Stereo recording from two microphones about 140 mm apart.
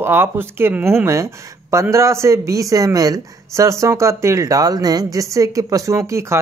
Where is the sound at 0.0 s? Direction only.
15° right (ahead or behind).